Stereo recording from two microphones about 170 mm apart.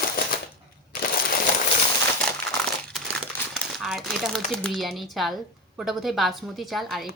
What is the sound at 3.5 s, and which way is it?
Speech, centre (ahead or behind).